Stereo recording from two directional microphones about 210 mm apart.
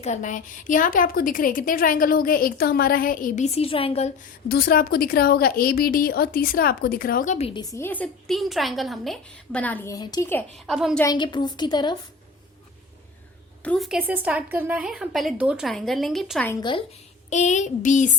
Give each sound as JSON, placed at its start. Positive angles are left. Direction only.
{"t": 0.0, "sound": "a woman's voice", "side_deg": 35}
{"t": 4.4, "sound": "a woman's voice", "side_deg": 45}
{"t": 7.7, "sound": "a woman's voice", "side_deg": 10}
{"t": 10.7, "sound": "speech", "side_deg": 0}
{"t": 11.0, "sound": "a woman's voice", "side_deg": 20}
{"t": 13.6, "sound": "speech", "side_deg": 5}
{"t": 16.5, "sound": "a woman's voice", "side_deg": 20}
{"t": 17.2, "sound": "a woman's voice", "side_deg": 35}